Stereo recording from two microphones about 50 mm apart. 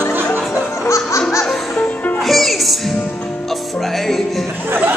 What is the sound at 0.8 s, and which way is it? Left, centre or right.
Music, left.